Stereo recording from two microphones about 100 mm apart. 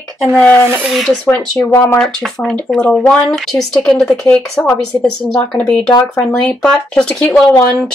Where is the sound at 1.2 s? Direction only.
15° left (ahead or behind).